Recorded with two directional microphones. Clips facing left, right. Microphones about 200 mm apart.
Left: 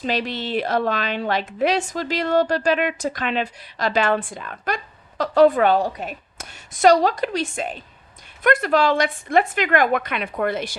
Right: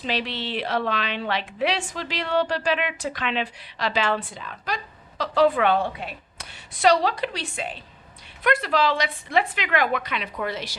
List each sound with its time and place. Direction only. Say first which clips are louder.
0.0 s a woman's voice: left 4 dB; 45° left (ahead or behind)